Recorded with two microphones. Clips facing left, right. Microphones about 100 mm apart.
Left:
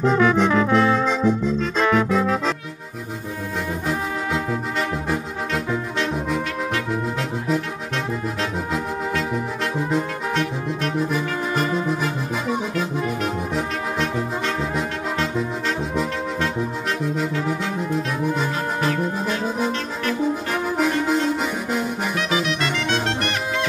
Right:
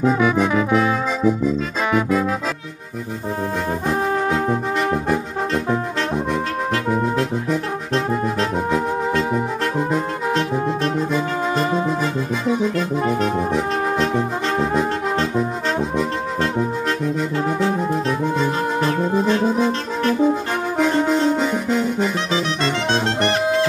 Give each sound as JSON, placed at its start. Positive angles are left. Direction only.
{"t": 0.0, "sound": "brass instrument", "side_deg": -5}
{"t": 7.9, "sound": "brass instrument", "side_deg": -35}
{"t": 13.0, "sound": "brass instrument", "side_deg": -40}
{"t": 17.5, "sound": "brass instrument", "side_deg": -40}
{"t": 18.8, "sound": "music", "side_deg": -35}
{"t": 21.4, "sound": "music", "side_deg": 5}
{"t": 22.3, "sound": "music", "side_deg": -30}